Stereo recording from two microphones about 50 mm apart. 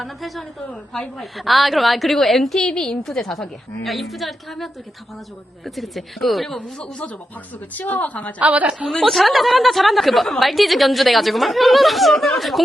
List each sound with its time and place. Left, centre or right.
0.0 s a woman's voice: centre
7.7 s a woman's voice: left
8.4 s a woman's voice: right
8.9 s a woman's voice: centre